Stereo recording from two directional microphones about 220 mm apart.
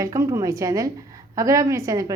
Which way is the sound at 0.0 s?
15° right (ahead or behind).